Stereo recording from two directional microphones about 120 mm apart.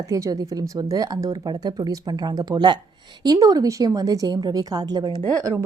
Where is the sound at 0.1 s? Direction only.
30° right (ahead or behind).